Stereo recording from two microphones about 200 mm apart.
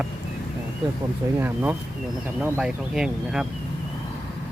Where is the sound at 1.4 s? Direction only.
10° right (ahead or behind).